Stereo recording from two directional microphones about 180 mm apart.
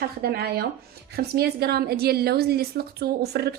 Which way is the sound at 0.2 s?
60° right (ahead or behind).